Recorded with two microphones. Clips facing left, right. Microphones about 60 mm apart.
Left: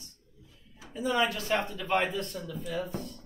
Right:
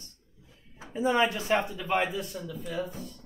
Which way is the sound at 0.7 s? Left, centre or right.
Right.